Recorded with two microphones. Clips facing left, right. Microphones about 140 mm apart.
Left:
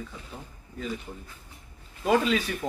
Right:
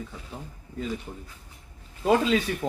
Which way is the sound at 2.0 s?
25° right (ahead or behind).